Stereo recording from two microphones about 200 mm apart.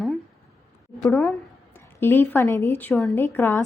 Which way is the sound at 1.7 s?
10° left (ahead or behind).